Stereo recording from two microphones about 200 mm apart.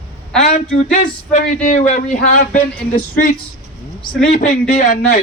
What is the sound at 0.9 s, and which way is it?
Speech, 40° left (ahead or behind).